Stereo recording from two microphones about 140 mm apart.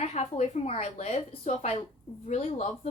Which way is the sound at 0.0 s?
50° left (ahead or behind).